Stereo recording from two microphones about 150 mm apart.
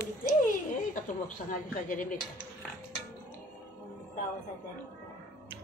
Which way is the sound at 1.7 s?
60° left (ahead or behind).